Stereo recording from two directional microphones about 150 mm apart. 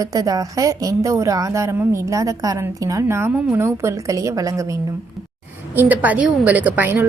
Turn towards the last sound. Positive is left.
turn(degrees=-10)  # may be behind; listen again after turning